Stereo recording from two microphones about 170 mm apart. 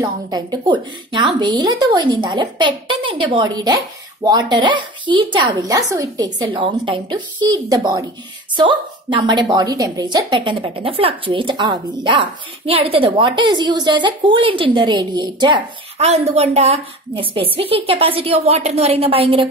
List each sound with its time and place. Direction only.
0.0 s a woman's voice: 25° right (ahead or behind)
16.0 s a woman's voice: 40° right (ahead or behind)